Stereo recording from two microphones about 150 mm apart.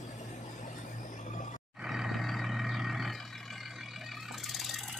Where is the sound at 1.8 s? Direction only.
Centre (ahead or behind).